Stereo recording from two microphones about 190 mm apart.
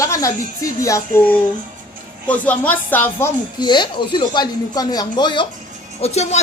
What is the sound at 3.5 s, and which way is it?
Speech, 25° left (ahead or behind).